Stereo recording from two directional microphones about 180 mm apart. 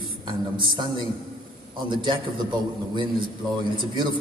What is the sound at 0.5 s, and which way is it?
A man's voice, 25° right (ahead or behind).